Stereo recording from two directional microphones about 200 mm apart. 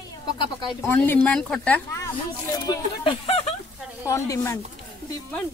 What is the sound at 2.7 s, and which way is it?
Speech, 25° left (ahead or behind).